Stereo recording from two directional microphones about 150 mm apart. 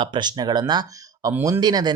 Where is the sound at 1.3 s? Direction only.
15° right (ahead or behind).